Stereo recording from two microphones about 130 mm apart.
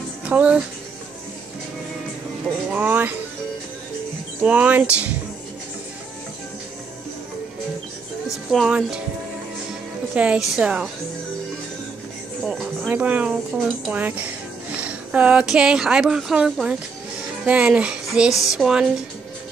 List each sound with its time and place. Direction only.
0.2 s a child's voice: 10° right (ahead or behind)
2.7 s speech: 15° right (ahead or behind)
4.4 s a sound: 10° right (ahead or behind)
8.5 s speech: 5° right (ahead or behind)
10.1 s a sound: 10° right (ahead or behind)
12.4 s music: 5° right (ahead or behind)
13.8 s speech: 10° right (ahead or behind)
17.5 s a sound: 10° right (ahead or behind)
18.4 s speech: centre (ahead or behind)